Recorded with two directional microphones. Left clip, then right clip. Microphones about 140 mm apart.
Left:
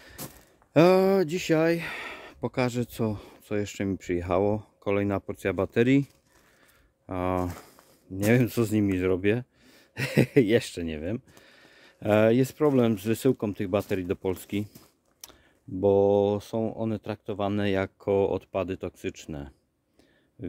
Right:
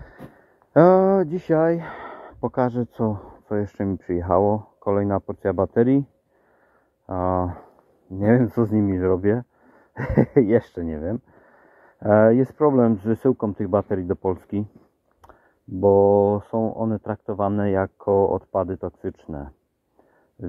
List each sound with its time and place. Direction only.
0.7 s speech: 35° left (ahead or behind)
5.8 s speech: 60° left (ahead or behind)
7.1 s speech: 35° left (ahead or behind)
9.4 s a sound: 30° left (ahead or behind)
12.2 s speech: 25° left (ahead or behind)
13.5 s speech: 20° left (ahead or behind)
15.8 s speech: 10° left (ahead or behind)
17.7 s speech: 30° left (ahead or behind)